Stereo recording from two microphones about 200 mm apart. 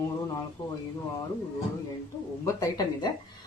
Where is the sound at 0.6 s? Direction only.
20° left (ahead or behind).